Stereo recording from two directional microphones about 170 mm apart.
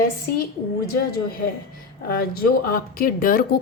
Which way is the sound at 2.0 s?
60° left (ahead or behind).